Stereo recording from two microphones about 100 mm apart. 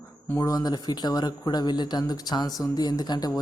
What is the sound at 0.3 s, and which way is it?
Speech, 35° left (ahead or behind).